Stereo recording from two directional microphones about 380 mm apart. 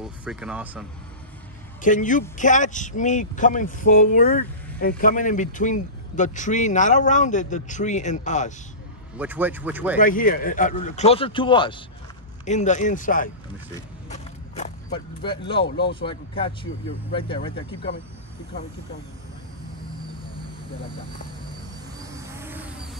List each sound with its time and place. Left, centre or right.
0.0 s speech: centre
1.8 s speech: centre
9.2 s speech: centre
9.9 s speech: left
13.7 s a sound: centre
15.2 s speech: centre
22.1 s a sound: centre